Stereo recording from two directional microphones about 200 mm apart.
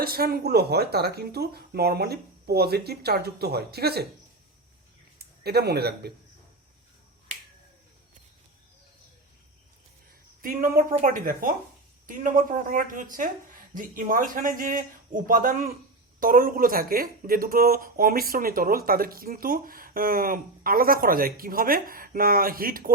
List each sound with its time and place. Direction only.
0.0 s speech: 50° right (ahead or behind)
5.4 s speech: 55° right (ahead or behind)
10.4 s speech: 45° right (ahead or behind)